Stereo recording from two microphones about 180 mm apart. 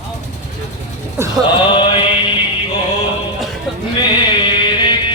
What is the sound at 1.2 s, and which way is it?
Music, 15° right (ahead or behind).